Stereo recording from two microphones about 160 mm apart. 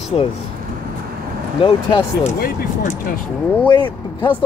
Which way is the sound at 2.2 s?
50° left (ahead or behind).